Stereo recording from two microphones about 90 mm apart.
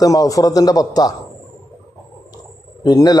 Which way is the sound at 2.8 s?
45° left (ahead or behind).